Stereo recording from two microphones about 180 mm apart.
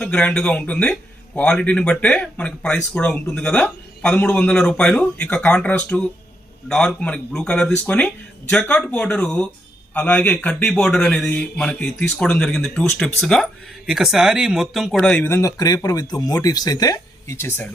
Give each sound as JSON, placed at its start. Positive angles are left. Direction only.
{"t": 0.0, "sound": "speech", "side_deg": 5}